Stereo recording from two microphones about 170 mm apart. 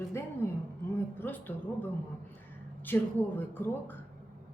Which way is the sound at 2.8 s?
10° left (ahead or behind).